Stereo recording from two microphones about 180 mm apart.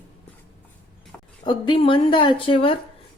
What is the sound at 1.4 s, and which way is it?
A woman's voice, 25° left (ahead or behind).